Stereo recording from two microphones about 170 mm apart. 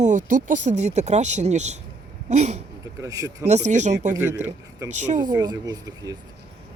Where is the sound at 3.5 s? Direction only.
40° right (ahead or behind).